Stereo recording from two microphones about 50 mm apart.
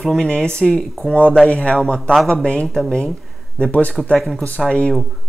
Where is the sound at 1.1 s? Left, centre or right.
Left.